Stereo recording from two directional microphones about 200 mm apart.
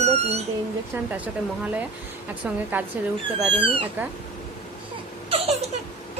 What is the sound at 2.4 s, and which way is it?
Speech, 5° right (ahead or behind).